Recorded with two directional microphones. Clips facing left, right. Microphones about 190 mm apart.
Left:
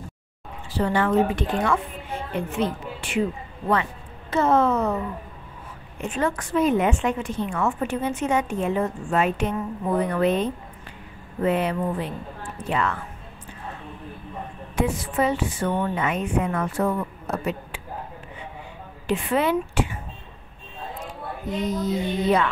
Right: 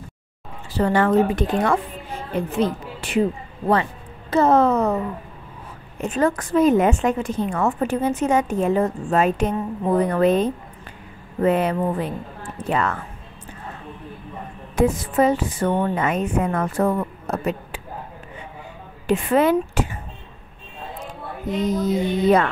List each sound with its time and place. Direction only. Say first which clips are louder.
0.7 s a woman's voice: right 3 dB; 45° right (ahead or behind)
14.8 s a woman's voice: right 5 dB; 40° right (ahead or behind)
19.0 s speech: right 5 dB; 45° right (ahead or behind)
21.8 s a woman's voice: right 5 dB; 50° right (ahead or behind)